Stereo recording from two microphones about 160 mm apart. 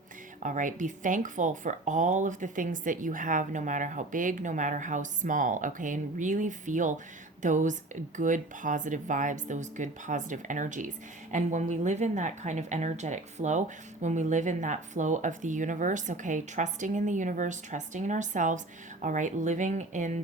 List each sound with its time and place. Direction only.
0.3 s speech: 50° right (ahead or behind)